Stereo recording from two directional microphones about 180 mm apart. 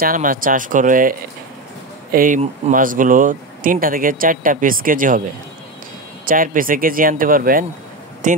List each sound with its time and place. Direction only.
0.0 s speech: 50° right (ahead or behind)
2.1 s speech: 45° right (ahead or behind)
6.2 s speech: 50° right (ahead or behind)